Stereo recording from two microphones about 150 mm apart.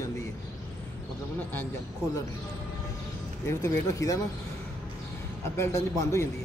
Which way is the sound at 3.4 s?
20° left (ahead or behind).